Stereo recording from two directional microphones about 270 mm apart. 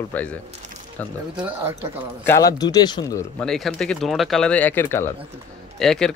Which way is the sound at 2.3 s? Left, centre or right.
Centre.